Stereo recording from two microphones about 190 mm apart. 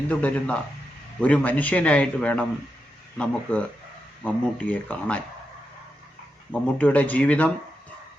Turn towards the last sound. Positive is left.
turn(degrees=10)  # may be behind; listen again after turning